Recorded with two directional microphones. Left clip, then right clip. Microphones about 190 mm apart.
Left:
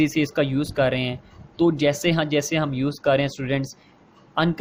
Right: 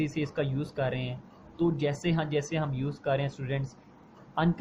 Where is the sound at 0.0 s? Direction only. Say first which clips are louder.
Left 10 dB; 50° left (ahead or behind).